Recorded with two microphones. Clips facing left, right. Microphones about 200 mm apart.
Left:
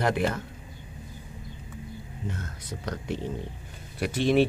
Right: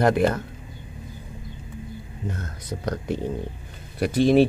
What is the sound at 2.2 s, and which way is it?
Speech, 40° right (ahead or behind).